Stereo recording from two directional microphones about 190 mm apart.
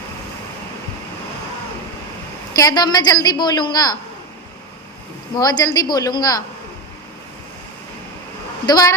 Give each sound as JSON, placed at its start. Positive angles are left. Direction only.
{"t": 2.6, "sound": "a woman's voice", "side_deg": 20}
{"t": 5.4, "sound": "a woman's voice", "side_deg": 20}
{"t": 8.6, "sound": "a woman's voice", "side_deg": 20}